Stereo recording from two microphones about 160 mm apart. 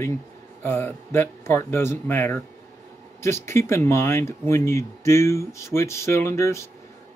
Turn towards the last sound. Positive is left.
turn(degrees=15)  # may be behind; listen again after turning